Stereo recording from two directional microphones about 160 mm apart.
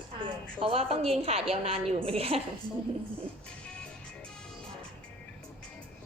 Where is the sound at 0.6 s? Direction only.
35° right (ahead or behind).